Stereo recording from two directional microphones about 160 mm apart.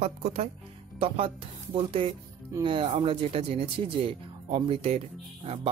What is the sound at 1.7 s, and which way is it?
Speech, 35° right (ahead or behind).